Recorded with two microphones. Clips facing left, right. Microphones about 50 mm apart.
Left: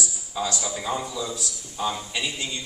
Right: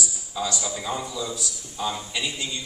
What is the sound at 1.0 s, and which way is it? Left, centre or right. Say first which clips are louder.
Speech: even; left.